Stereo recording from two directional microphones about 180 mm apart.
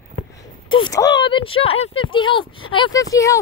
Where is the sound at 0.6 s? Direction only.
25° left (ahead or behind).